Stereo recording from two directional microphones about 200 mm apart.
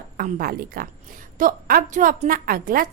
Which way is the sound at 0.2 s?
45° right (ahead or behind).